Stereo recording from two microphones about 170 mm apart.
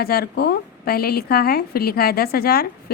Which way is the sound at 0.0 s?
65° left (ahead or behind).